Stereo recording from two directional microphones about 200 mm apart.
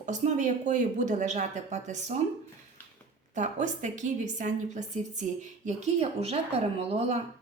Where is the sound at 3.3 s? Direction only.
40° right (ahead or behind).